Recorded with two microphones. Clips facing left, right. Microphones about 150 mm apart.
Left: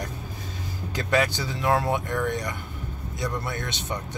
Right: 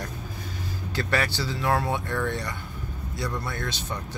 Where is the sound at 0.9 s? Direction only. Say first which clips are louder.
Left 3 dB; 15° left (ahead or behind).